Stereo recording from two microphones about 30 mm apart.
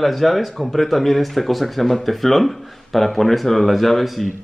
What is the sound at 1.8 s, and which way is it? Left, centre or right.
Speech, centre.